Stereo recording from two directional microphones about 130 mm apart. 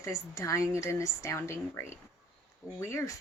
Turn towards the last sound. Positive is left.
turn(degrees=20)  # may be behind; listen again after turning